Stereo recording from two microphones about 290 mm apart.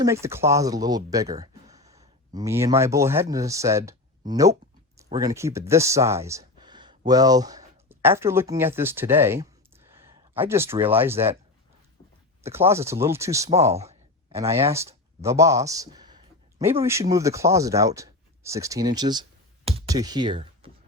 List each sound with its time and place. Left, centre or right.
0.0 s speech: centre
1.9 s speech: centre
12.4 s speech: centre